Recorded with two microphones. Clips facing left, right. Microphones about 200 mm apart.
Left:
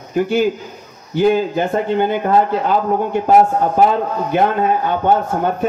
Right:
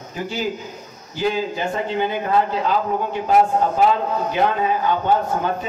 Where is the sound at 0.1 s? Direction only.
55° left (ahead or behind).